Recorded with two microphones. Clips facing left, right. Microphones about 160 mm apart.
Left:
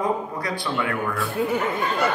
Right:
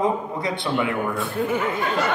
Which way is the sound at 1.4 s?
5° left (ahead or behind).